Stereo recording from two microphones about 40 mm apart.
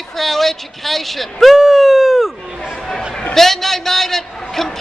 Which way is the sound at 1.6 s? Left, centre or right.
Centre.